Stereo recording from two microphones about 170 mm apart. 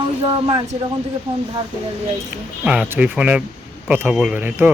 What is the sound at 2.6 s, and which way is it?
Speech, 5° right (ahead or behind).